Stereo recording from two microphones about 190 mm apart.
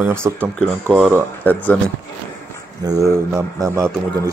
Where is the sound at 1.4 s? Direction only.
10° left (ahead or behind).